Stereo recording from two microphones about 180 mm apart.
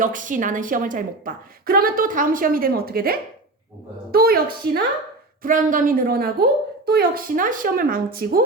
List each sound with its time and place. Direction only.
0.0 s a woman's voice: 45° right (ahead or behind)
5.4 s a woman's voice: 45° right (ahead or behind)